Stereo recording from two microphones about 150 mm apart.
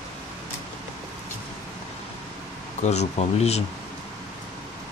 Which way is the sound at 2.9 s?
45° left (ahead or behind).